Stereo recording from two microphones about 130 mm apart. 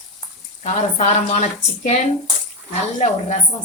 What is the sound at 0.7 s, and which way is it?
A woman's voice, 65° left (ahead or behind).